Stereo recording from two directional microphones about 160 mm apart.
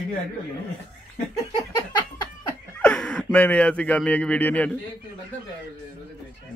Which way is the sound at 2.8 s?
5° left (ahead or behind).